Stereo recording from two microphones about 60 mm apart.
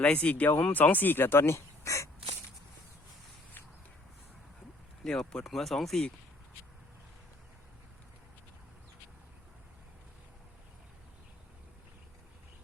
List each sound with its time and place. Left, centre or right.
0.0 s speech: left
5.0 s speech: centre